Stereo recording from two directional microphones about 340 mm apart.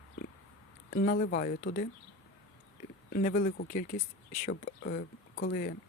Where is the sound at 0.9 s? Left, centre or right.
Left.